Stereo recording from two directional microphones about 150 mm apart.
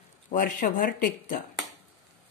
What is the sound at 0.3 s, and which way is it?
Speech, 60° left (ahead or behind).